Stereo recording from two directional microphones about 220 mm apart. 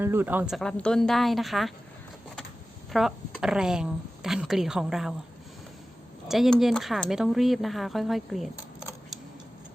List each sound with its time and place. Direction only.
0.0 s speech: 10° right (ahead or behind)
2.9 s speech: centre (ahead or behind)
6.2 s speech: centre (ahead or behind)